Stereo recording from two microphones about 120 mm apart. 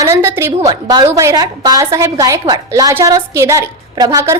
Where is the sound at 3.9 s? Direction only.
35° right (ahead or behind).